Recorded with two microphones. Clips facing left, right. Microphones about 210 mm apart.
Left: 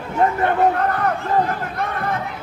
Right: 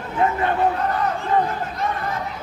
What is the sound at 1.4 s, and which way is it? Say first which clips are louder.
Chatter: left 1 dB; 60° left (ahead or behind).